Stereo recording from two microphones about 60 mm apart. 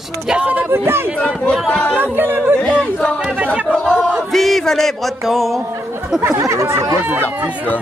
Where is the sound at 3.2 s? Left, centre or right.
Right.